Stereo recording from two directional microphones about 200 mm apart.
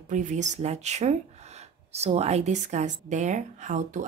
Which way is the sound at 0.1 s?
40° right (ahead or behind).